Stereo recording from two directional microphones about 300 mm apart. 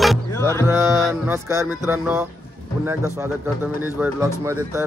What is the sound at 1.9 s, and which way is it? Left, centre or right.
Speech, centre.